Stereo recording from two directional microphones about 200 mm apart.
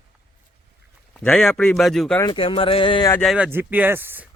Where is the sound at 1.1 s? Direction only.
5° left (ahead or behind).